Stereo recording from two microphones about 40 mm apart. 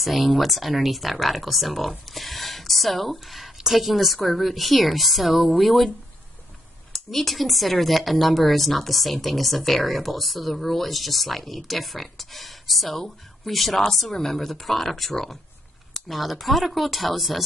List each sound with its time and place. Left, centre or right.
0.0 s speech: centre
6.9 s speech: centre